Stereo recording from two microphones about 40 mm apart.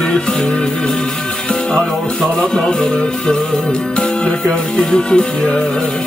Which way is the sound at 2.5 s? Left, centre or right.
Centre.